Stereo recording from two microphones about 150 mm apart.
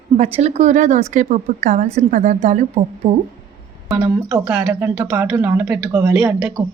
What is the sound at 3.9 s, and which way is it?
Speech, 20° right (ahead or behind).